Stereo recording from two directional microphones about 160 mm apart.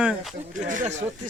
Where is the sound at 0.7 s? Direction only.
50° right (ahead or behind).